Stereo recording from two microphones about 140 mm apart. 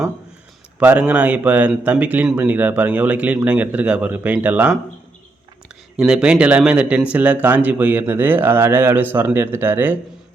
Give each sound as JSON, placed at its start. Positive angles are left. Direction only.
{"t": 0.8, "sound": "speech", "side_deg": -10}
{"t": 6.0, "sound": "speech", "side_deg": -5}